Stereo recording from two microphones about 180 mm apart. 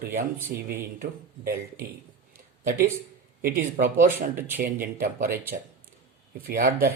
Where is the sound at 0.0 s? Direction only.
55° right (ahead or behind).